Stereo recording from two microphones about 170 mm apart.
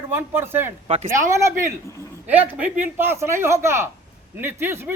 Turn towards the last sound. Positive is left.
turn(degrees=-15)  # may be behind; listen again after turning